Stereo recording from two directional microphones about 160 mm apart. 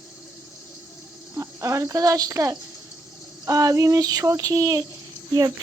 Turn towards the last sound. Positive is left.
turn(degrees=-20)  # may be behind; listen again after turning